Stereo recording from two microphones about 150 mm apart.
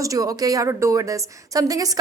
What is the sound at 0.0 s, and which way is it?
A woman's voice, 20° right (ahead or behind).